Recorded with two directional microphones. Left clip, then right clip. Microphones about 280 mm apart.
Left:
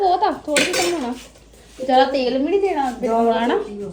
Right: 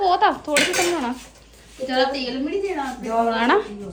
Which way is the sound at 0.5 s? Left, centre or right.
Centre.